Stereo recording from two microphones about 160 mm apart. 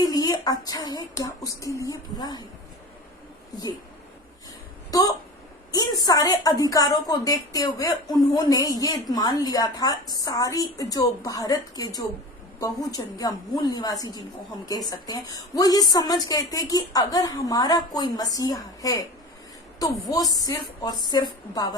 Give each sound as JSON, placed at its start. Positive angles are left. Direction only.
{"t": 0.0, "sound": "a woman's voice", "side_deg": 25}
{"t": 4.9, "sound": "a woman's voice", "side_deg": 20}